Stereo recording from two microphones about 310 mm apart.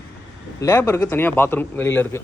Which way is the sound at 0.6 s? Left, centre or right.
Centre.